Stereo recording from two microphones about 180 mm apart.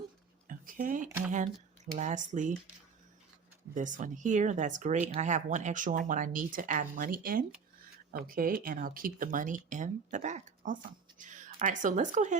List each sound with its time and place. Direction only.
0.4 s a sound: 50° right (ahead or behind)
1.8 s speech: 40° right (ahead or behind)
3.8 s speech: 45° right (ahead or behind)